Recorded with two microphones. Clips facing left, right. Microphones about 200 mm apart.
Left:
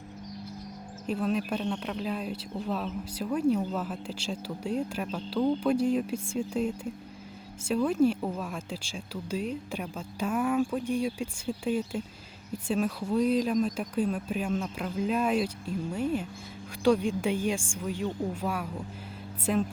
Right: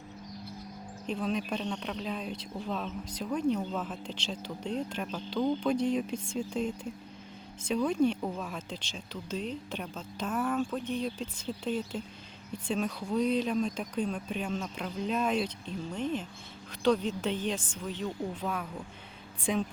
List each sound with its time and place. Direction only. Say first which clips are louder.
1.0 s speech: left 3 dB; 5° left (ahead or behind)